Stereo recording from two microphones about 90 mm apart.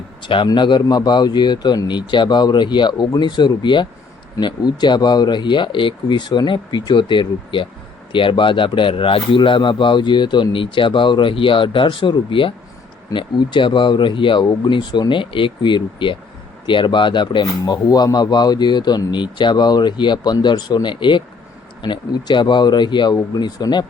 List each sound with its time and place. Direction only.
0.2 s a man's voice: 70° left (ahead or behind)
17.8 s a man's voice: 50° left (ahead or behind)
23.1 s speech: 45° left (ahead or behind)